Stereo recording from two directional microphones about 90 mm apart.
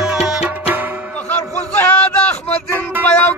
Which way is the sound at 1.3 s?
20° left (ahead or behind).